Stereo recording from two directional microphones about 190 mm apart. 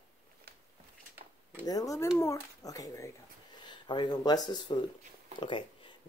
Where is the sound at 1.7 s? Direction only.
20° left (ahead or behind).